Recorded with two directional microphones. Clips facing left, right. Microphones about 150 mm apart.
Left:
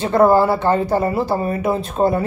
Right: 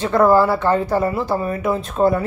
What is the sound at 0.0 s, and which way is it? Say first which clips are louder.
Speech: left 1 dB; 25° left (ahead or behind).